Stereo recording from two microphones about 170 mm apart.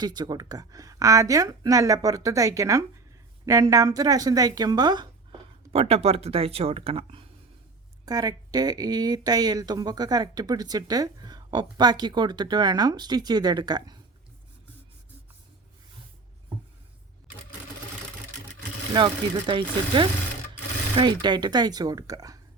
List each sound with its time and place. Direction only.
0.0 s speech: 25° right (ahead or behind)
8.0 s speech: 20° right (ahead or behind)
18.9 s speech: 30° right (ahead or behind)